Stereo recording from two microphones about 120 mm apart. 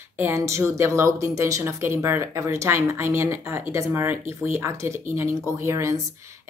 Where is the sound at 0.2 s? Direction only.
25° right (ahead or behind).